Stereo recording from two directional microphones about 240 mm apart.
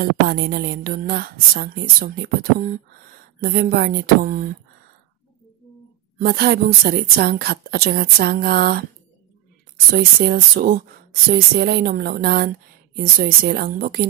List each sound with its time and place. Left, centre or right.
0.0 s a woman's voice: right
6.1 s a woman's voice: right
9.9 s a woman's voice: right